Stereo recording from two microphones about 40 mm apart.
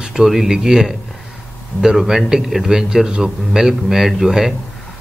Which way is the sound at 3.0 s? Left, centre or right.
Right.